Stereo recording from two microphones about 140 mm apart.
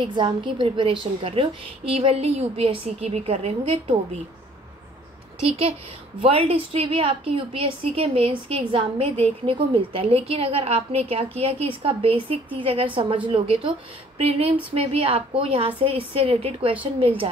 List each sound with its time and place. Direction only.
0.0 s a woman's voice: 35° right (ahead or behind)
5.4 s a woman's voice: 45° right (ahead or behind)